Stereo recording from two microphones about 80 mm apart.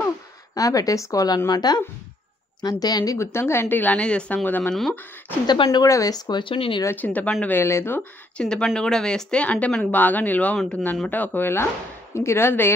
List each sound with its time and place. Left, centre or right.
0.6 s speech: left
3.2 s speech: left
5.5 s speech: left
6.4 s speech: left
7.0 s speech: centre
7.4 s speech: left
8.4 s speech: centre; by 12.7 s left